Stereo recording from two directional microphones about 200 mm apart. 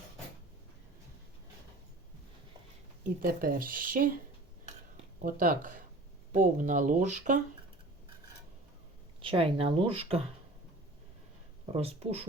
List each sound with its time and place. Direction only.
3.0 s speech: 45° right (ahead or behind)
5.2 s speech: 45° right (ahead or behind)
9.2 s speech: 25° right (ahead or behind)
11.6 s speech: 30° right (ahead or behind)